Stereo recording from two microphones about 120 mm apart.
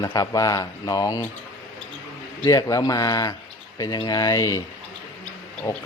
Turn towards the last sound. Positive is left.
turn(degrees=35)  # may be behind; listen again after turning